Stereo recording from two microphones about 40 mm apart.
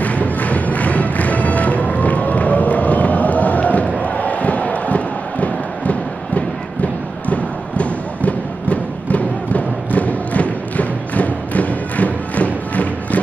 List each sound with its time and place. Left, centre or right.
0.0 s music: left